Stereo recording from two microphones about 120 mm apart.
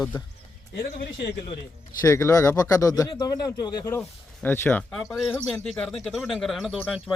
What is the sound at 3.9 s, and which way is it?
Speech, 20° left (ahead or behind).